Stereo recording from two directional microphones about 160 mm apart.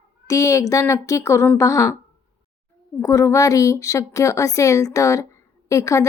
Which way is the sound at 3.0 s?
20° left (ahead or behind).